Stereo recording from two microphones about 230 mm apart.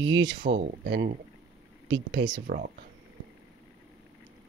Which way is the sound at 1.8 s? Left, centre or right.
Right.